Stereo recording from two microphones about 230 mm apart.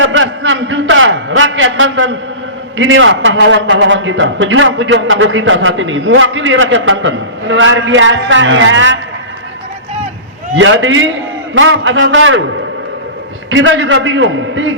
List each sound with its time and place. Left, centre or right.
0.0 s a sound: right
2.7 s a man's voice: right
10.5 s a man's voice: right
13.5 s a man's voice: right